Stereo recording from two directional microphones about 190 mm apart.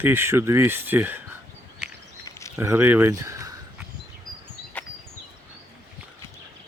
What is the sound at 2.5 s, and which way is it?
Speech, 10° right (ahead or behind).